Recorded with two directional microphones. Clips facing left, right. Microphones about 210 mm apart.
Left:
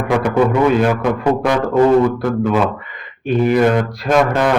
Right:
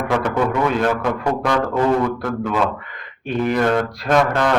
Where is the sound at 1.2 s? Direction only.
20° left (ahead or behind).